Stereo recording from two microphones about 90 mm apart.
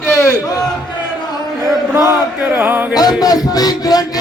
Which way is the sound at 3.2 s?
45° left (ahead or behind).